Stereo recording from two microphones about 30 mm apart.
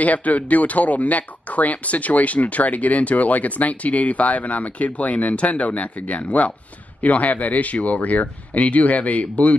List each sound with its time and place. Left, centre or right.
0.0 s speech: left